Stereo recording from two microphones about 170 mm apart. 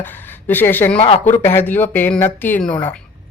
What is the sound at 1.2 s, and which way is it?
Speech, 15° left (ahead or behind).